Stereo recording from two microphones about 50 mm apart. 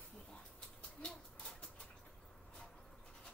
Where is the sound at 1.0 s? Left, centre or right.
Centre.